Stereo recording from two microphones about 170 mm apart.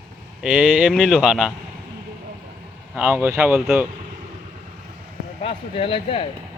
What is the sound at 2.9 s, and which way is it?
Speech, 10° right (ahead or behind).